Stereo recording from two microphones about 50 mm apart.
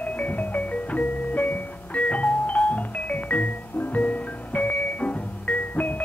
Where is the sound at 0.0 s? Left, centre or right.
Left.